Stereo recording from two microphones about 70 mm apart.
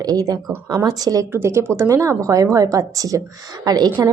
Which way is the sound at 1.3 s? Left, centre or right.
Right.